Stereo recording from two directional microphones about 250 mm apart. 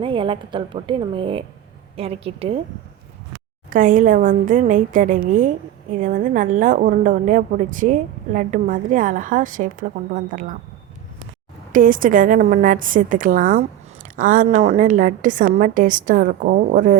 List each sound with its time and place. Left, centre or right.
0.0 s a woman's voice: right
3.7 s a woman's voice: right
11.7 s a woman's voice: right